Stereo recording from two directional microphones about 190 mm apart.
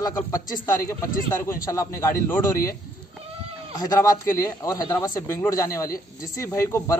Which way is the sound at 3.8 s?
15° left (ahead or behind).